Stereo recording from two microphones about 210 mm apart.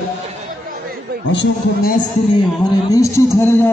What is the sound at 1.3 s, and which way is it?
Speech, 55° left (ahead or behind).